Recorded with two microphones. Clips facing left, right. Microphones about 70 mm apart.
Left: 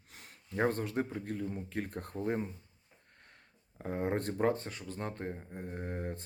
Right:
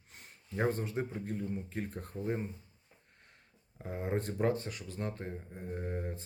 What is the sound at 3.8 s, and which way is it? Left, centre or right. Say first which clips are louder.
Speech: left 2 dB; left.